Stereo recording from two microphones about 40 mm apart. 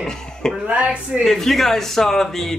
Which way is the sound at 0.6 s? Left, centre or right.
Right.